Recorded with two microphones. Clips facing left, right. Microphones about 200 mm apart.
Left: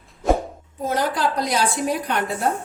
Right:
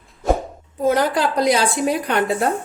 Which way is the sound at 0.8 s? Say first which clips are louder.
Right 5 dB; 70° right (ahead or behind).